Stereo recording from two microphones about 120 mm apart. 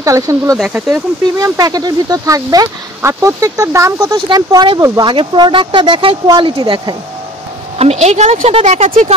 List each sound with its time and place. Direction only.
0.0 s speech: 25° right (ahead or behind)
5.0 s speech: 40° right (ahead or behind)
7.8 s speech: 65° right (ahead or behind)